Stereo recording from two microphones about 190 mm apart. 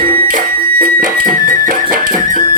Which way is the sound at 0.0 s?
45° right (ahead or behind).